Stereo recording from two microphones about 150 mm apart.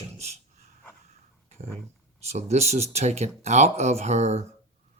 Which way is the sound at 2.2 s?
45° right (ahead or behind).